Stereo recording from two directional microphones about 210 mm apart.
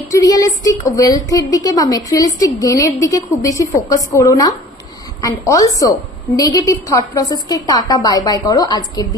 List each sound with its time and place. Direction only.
0.1 s a woman's voice: 15° left (ahead or behind)
5.8 s a woman's voice: 15° left (ahead or behind)